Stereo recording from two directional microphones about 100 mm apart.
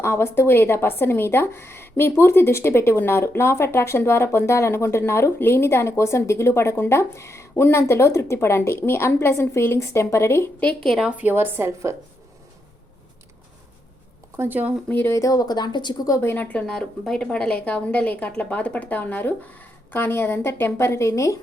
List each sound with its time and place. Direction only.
0.0 s a woman's voice: 25° left (ahead or behind)
10.6 s a woman's voice: 15° left (ahead or behind)
10.8 s a woman's voice: centre (ahead or behind)
11.2 s a woman's voice: 20° right (ahead or behind)
14.3 s a woman's voice: 20° right (ahead or behind)
14.8 s a woman's voice: 20° left (ahead or behind)
15.2 s speech: 40° left (ahead or behind)
16.2 s a woman's voice: 20° left (ahead or behind)